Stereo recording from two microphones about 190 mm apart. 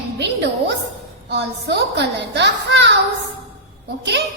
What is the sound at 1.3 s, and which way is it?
A woman's voice, 60° right (ahead or behind).